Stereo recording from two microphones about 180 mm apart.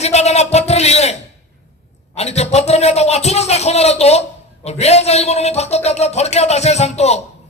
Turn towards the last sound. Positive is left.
turn(degrees=35)  # may be behind; listen again after turning